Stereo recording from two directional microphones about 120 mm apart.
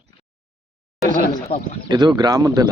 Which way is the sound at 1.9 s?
35° right (ahead or behind).